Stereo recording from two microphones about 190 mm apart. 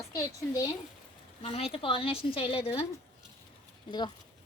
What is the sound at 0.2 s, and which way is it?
Speech, 20° left (ahead or behind).